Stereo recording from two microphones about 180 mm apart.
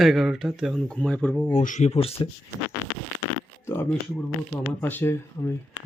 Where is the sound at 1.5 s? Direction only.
40° left (ahead or behind).